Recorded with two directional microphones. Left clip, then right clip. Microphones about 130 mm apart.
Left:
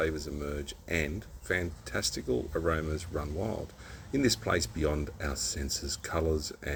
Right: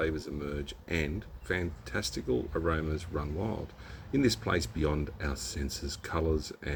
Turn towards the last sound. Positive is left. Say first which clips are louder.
# left 1 dB
turn(degrees=-60)  # may be behind; listen again after turning